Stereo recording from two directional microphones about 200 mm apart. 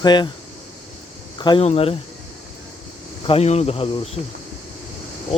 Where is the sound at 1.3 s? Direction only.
25° left (ahead or behind).